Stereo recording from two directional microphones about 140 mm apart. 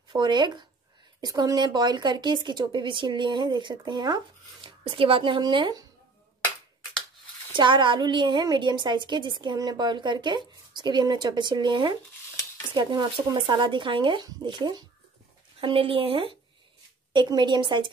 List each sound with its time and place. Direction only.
0.1 s a woman's voice: 30° right (ahead or behind)
7.5 s a woman's voice: 35° right (ahead or behind)
15.6 s a woman's voice: 40° right (ahead or behind)